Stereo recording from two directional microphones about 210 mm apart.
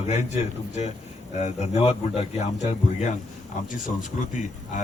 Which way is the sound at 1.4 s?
30° left (ahead or behind).